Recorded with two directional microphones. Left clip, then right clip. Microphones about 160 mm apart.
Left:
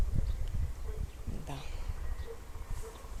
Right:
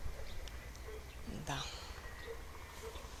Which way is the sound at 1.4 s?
Centre (ahead or behind).